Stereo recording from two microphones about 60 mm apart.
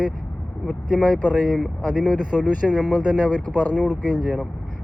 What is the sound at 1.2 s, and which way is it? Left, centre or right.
Speech, left.